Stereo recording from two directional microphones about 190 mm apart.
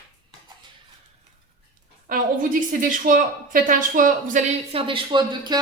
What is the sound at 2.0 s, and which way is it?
A woman's voice, 45° right (ahead or behind).